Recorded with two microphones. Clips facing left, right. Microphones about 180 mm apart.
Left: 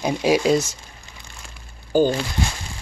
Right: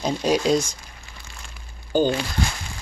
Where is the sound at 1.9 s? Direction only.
5° left (ahead or behind).